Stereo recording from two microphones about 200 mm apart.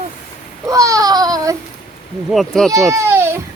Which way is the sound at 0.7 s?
15° right (ahead or behind).